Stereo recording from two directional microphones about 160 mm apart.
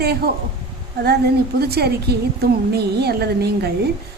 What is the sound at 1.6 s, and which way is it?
A woman's voice, 80° right.